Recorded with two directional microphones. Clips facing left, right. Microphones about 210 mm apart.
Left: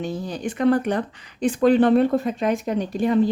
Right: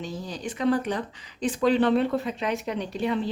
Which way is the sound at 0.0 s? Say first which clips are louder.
Left 6 dB; 60° left (ahead or behind).